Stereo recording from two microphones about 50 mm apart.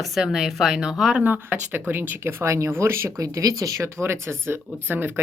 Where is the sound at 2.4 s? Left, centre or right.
Right.